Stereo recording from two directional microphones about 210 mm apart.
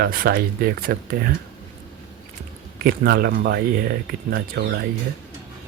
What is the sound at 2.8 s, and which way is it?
Speech, 45° right (ahead or behind).